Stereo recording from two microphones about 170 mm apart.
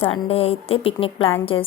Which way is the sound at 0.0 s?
35° left (ahead or behind).